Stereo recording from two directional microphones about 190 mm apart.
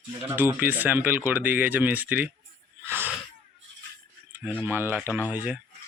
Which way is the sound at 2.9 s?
10° right (ahead or behind).